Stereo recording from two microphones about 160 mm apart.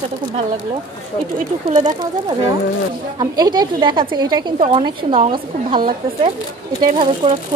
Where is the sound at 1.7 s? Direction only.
50° right (ahead or behind).